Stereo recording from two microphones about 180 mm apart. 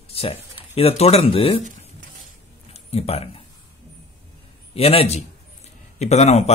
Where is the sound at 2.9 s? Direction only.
35° left (ahead or behind).